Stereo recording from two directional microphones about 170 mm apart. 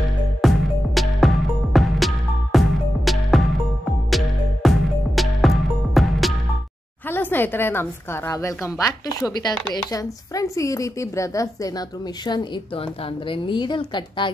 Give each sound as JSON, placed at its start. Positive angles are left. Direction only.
{"t": 0.4, "sound": "music", "side_deg": 0}
{"t": 7.1, "sound": "a woman's voice", "side_deg": 10}